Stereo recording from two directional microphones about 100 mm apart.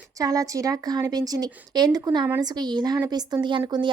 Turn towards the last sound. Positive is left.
turn(degrees=-45)  # may be behind; listen again after turning